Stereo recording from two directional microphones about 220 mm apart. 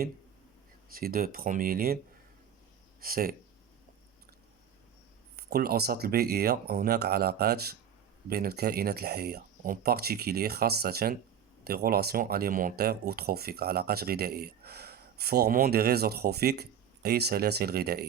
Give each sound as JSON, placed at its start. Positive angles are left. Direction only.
{"t": 0.9, "sound": "speech", "side_deg": -40}
{"t": 3.0, "sound": "speech", "side_deg": -40}
{"t": 5.4, "sound": "speech", "side_deg": -45}